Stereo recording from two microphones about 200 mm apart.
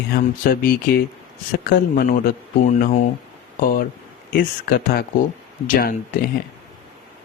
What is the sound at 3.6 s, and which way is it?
Speech, 45° left (ahead or behind).